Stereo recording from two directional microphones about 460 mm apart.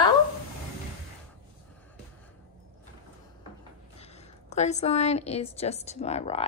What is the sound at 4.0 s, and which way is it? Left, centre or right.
A woman's voice, centre.